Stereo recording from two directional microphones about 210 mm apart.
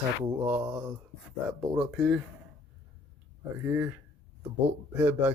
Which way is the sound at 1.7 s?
5° right (ahead or behind).